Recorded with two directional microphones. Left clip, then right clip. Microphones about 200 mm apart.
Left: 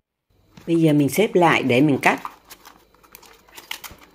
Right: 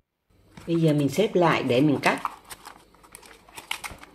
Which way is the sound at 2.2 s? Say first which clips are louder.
Right 3 dB; 10° right (ahead or behind).